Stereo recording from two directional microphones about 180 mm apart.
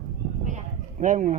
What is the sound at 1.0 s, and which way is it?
Speech, 45° right (ahead or behind).